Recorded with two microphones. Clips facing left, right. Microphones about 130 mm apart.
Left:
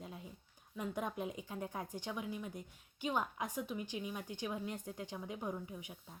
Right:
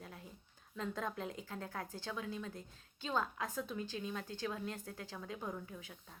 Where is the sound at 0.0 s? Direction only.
20° left (ahead or behind).